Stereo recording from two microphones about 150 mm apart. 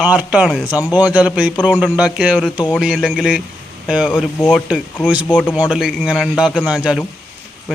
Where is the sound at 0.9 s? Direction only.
10° right (ahead or behind).